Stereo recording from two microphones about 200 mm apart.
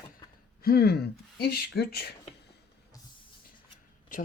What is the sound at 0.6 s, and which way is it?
Speech, 50° left (ahead or behind).